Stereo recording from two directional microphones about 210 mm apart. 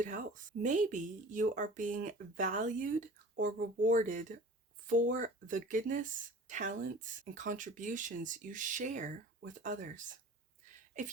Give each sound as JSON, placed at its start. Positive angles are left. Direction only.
{"t": 0.0, "sound": "speech", "side_deg": -40}